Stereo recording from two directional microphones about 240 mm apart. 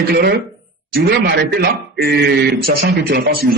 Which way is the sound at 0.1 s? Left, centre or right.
Right.